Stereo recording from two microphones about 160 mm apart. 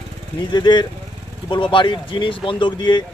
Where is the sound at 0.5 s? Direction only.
30° left (ahead or behind).